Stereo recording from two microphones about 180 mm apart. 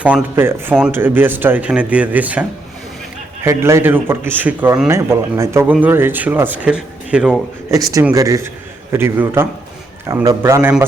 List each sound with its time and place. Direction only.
0.0 s speech: 10° right (ahead or behind)
7.7 s speech: 20° right (ahead or behind)